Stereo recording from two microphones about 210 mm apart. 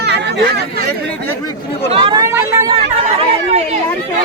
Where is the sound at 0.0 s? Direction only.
50° right (ahead or behind).